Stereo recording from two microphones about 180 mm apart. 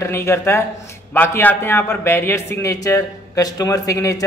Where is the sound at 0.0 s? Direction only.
15° left (ahead or behind).